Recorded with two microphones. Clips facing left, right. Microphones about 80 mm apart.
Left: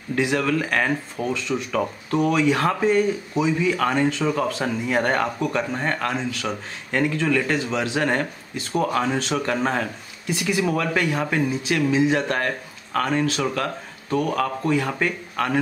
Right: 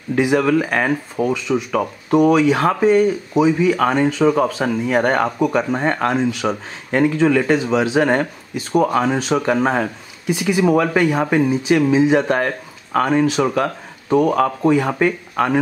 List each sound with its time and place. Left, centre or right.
0.1 s speech: centre